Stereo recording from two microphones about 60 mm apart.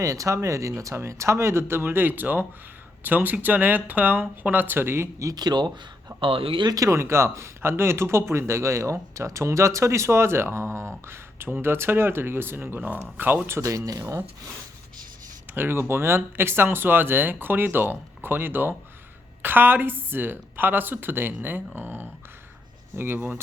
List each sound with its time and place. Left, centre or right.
0.0 s speech: right
6.1 s speech: right
6.7 s speech: right
13.6 s speech: right
15.5 s speech: right